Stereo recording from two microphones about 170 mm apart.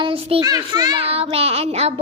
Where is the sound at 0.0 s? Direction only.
35° right (ahead or behind).